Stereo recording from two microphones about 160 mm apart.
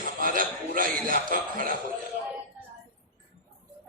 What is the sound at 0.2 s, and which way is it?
Speech, 60° right (ahead or behind).